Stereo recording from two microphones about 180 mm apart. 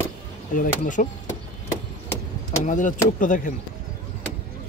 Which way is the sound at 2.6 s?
45° left (ahead or behind).